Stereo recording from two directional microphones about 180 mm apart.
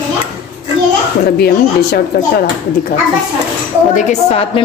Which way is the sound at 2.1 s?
65° left (ahead or behind).